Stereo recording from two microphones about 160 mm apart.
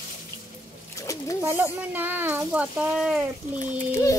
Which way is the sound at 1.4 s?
15° right (ahead or behind).